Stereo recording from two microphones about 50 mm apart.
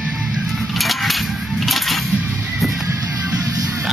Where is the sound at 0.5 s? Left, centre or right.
Centre.